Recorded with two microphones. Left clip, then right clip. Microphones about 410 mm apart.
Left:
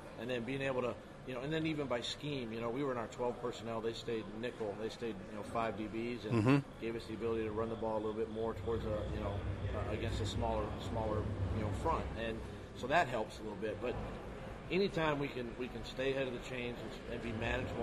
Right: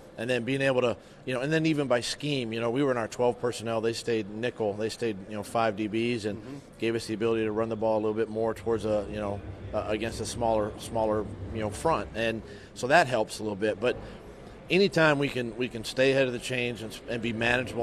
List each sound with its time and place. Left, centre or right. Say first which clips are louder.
0.2 s a man's voice: right 12 dB; right
9.8 s a man's voice: right 9 dB; right